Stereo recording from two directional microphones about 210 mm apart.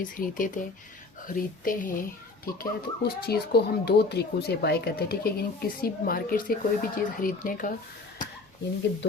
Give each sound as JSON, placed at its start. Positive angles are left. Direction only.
{"t": 0.0, "sound": "a child's voice", "side_deg": 40}